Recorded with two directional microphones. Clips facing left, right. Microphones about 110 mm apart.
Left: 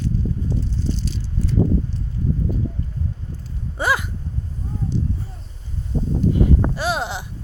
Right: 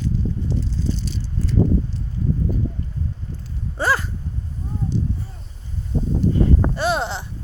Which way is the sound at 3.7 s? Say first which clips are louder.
Even; 10° left (ahead or behind).